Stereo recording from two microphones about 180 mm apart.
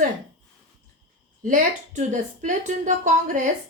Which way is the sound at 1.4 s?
45° right (ahead or behind).